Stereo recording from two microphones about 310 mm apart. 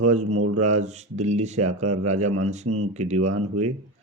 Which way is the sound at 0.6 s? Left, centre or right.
Right.